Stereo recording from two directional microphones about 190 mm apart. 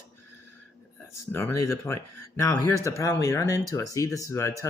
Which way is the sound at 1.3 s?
15° left (ahead or behind).